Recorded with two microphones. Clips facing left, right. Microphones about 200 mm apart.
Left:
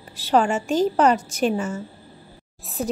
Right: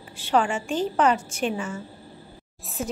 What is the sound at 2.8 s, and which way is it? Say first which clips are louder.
Speech: left 4 dB; 35° left (ahead or behind).